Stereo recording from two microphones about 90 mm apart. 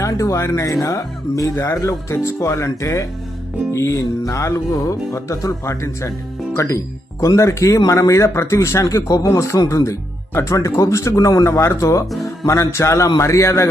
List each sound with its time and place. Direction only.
0.0 s music: 35° left (ahead or behind)